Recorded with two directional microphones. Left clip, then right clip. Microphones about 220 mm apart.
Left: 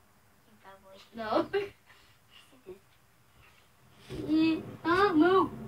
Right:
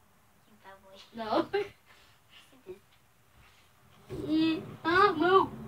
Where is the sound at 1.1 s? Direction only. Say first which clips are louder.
Even; 10° right (ahead or behind).